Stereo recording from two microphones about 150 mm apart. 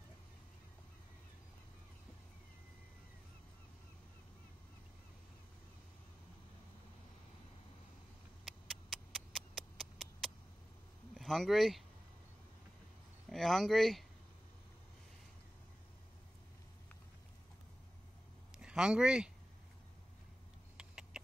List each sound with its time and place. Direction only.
8.5 s a sound: centre (ahead or behind)
11.1 s speech: centre (ahead or behind)
13.3 s speech: centre (ahead or behind)
18.5 s speech: 5° right (ahead or behind)
20.7 s rodents: 5° right (ahead or behind)